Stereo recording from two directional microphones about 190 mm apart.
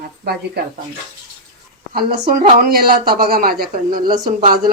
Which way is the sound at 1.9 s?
55° right (ahead or behind).